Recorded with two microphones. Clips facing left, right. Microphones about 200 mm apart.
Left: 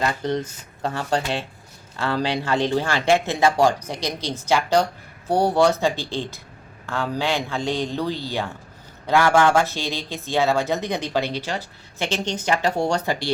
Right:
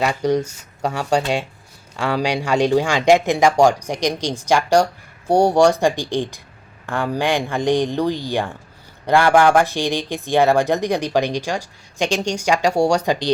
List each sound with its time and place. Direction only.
0.0 s speech: 10° right (ahead or behind)